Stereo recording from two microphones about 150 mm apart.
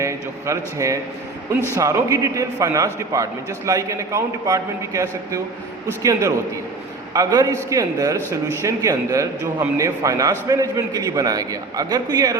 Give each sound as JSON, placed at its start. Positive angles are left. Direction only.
{"t": 0.0, "sound": "a man's voice", "side_deg": -20}